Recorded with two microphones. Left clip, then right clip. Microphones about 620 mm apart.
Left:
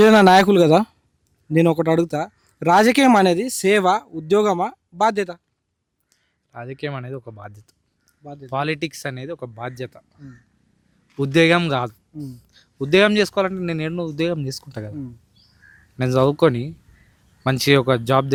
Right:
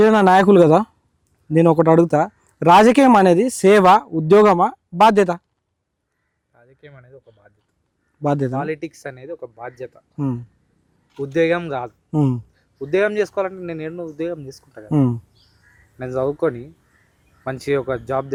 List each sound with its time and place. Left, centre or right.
0.0 s speech: centre
6.5 s speech: left
8.2 s speech: right
8.5 s speech: left
11.2 s speech: left
16.0 s speech: left